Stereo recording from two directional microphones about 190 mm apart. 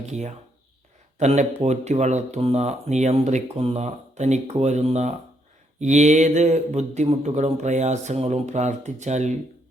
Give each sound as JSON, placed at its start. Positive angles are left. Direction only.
{"t": 0.0, "sound": "speech", "side_deg": -35}